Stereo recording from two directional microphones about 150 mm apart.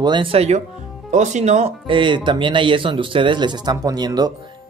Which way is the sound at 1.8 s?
35° right (ahead or behind).